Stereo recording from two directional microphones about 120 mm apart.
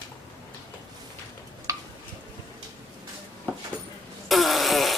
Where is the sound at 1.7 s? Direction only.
25° right (ahead or behind).